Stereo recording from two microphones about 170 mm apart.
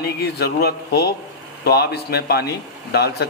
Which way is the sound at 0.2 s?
70° left (ahead or behind).